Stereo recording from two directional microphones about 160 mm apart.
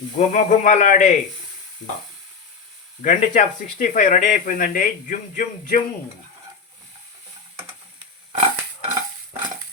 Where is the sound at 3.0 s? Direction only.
50° left (ahead or behind).